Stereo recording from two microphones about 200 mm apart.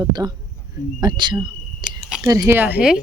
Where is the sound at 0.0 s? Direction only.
20° right (ahead or behind).